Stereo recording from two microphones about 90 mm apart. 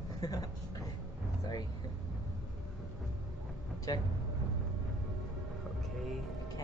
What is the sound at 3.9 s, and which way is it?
Speech, 45° left (ahead or behind).